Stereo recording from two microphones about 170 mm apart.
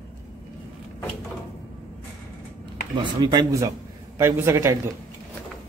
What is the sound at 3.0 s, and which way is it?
A man's voice, 25° right (ahead or behind).